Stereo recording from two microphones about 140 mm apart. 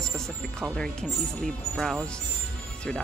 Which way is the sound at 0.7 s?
5° left (ahead or behind).